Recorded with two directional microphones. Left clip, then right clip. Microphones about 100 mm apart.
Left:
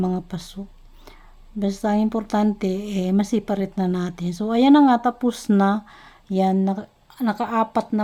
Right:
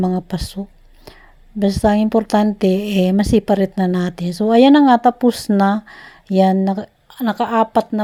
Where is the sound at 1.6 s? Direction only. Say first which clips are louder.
Right 7 dB; 35° right (ahead or behind).